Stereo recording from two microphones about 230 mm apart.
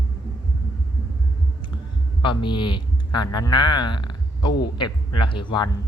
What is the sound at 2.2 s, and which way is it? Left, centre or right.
Speech, left.